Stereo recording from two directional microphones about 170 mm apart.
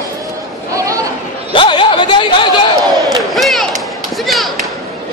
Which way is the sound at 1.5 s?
30° left (ahead or behind).